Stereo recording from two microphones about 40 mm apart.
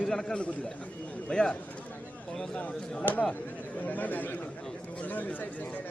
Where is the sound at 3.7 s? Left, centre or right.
Left.